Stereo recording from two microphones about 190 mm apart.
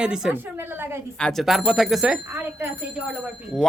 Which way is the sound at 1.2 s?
5° left (ahead or behind).